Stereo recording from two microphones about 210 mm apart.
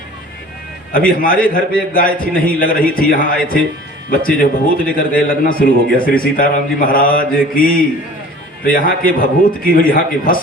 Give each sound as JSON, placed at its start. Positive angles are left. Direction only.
{"t": 0.9, "sound": "a man's voice", "side_deg": 45}